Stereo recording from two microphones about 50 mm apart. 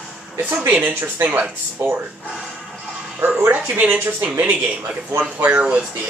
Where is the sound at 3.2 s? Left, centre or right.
Right.